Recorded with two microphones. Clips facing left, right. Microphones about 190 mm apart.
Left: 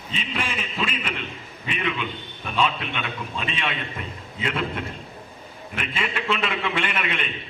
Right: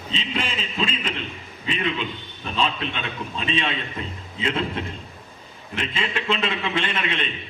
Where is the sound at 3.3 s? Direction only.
30° right (ahead or behind).